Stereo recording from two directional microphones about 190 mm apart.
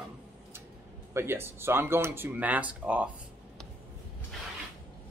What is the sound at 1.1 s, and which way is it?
Speech, 10° right (ahead or behind).